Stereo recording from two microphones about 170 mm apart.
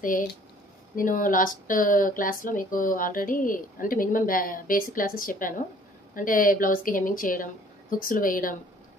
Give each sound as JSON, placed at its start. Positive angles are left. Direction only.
{"t": 0.9, "sound": "a woman's voice", "side_deg": 50}